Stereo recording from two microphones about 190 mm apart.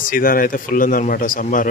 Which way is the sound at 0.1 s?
50° left (ahead or behind).